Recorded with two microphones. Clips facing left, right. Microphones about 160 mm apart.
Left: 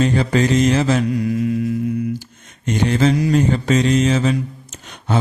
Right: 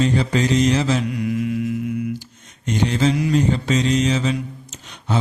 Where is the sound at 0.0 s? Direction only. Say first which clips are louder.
Left 2 dB; 55° left (ahead or behind).